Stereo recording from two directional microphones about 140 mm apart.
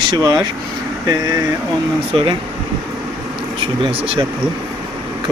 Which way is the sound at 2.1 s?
35° right (ahead or behind).